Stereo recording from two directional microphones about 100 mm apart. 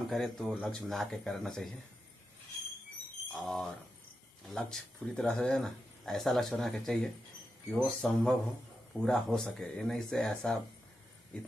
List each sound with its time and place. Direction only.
0.1 s speech: centre (ahead or behind)
3.3 s speech: centre (ahead or behind)